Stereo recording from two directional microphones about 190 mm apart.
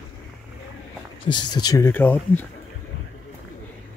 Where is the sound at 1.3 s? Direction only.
20° left (ahead or behind).